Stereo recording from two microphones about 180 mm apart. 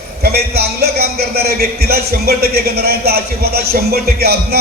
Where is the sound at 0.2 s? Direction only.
60° right (ahead or behind).